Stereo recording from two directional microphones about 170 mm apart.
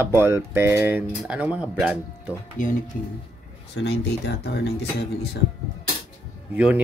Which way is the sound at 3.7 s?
80° left.